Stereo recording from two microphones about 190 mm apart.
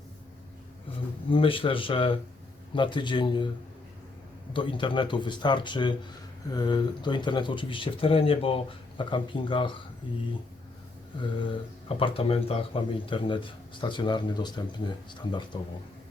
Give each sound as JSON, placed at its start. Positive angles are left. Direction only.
{"t": 1.3, "sound": "speech", "side_deg": 30}
{"t": 4.5, "sound": "speech", "side_deg": 25}
{"t": 11.9, "sound": "speech", "side_deg": 30}